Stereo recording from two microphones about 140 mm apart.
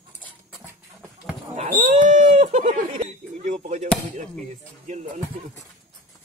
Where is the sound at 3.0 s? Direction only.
55° right (ahead or behind).